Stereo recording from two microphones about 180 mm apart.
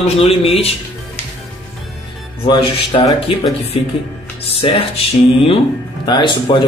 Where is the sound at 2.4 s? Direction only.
25° left (ahead or behind).